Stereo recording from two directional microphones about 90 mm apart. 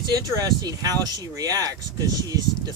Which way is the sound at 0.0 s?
45° right (ahead or behind).